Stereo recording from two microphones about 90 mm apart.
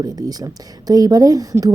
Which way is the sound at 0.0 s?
45° right (ahead or behind).